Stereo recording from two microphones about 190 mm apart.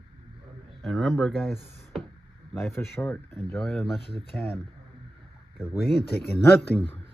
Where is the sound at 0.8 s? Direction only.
Centre (ahead or behind).